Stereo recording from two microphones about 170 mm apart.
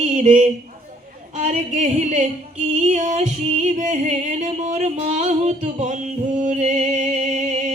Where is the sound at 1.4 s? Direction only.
45° right (ahead or behind).